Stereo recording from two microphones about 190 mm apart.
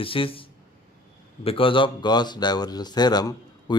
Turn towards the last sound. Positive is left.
turn(degrees=20)  # may be behind; listen again after turning